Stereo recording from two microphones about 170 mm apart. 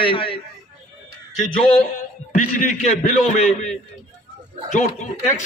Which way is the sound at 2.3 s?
45° left (ahead or behind).